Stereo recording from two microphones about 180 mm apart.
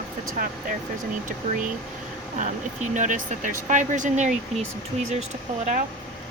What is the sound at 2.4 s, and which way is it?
Speech, 45° right (ahead or behind).